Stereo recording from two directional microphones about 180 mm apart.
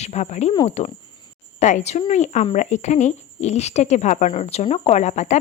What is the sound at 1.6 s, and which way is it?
A woman's voice, 40° left (ahead or behind).